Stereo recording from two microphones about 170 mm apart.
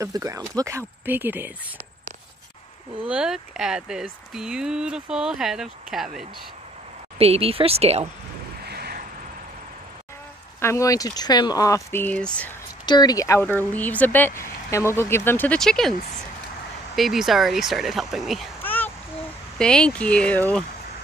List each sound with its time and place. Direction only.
0.0 s speech: 20° right (ahead or behind)
3.1 s speech: 5° right (ahead or behind)
7.2 s speech: 35° right (ahead or behind)
8.6 s vehicle: 70° right (ahead or behind)
10.6 s speech: 15° left (ahead or behind)
12.8 s speech: 25° left (ahead or behind); by 15.9 s 5° left (ahead or behind)
16.9 s speech: centre (ahead or behind)
18.6 s a sound: 10° left (ahead or behind)
19.6 s speech: 5° left (ahead or behind)